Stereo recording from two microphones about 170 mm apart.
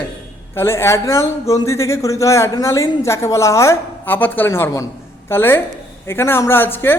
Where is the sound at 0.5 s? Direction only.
15° left (ahead or behind).